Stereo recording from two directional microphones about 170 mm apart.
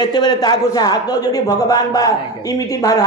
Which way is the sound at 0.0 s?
25° left (ahead or behind).